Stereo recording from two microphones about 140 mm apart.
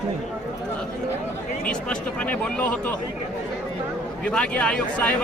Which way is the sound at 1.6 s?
10° left (ahead or behind).